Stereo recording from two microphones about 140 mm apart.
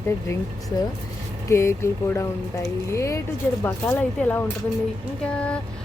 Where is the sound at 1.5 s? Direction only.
20° left (ahead or behind).